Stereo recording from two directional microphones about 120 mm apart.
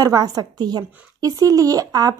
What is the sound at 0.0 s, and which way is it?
A woman's voice, 30° right (ahead or behind).